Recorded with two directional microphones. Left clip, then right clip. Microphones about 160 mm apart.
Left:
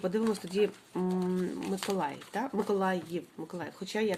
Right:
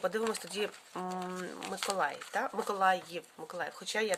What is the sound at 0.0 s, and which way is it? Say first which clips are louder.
Speech: left 1 dB; 30° right (ahead or behind).